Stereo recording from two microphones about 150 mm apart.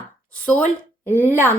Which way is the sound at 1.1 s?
15° right (ahead or behind).